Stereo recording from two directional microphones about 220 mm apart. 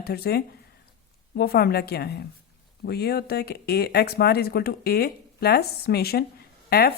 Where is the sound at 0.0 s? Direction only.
45° left (ahead or behind).